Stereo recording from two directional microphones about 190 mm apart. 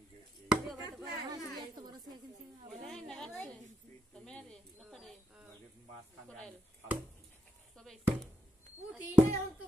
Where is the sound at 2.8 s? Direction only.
Centre (ahead or behind).